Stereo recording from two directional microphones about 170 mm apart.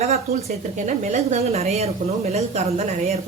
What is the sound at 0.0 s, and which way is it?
A woman's voice, 40° right (ahead or behind).